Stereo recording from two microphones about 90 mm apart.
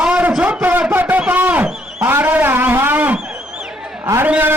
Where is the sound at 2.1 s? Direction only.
20° right (ahead or behind).